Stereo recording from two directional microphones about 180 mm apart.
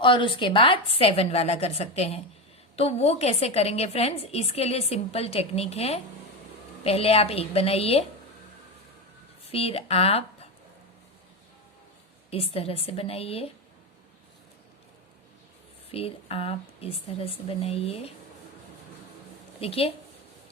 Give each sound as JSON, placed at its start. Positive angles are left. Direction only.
{"t": 0.0, "sound": "a woman's voice", "side_deg": 25}
{"t": 9.5, "sound": "speech", "side_deg": 35}
{"t": 12.3, "sound": "a woman's voice", "side_deg": 35}
{"t": 15.9, "sound": "a woman's voice", "side_deg": 35}
{"t": 19.5, "sound": "a woman's voice", "side_deg": 35}